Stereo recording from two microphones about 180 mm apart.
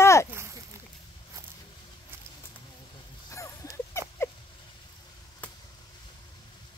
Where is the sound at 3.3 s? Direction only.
15° left (ahead or behind).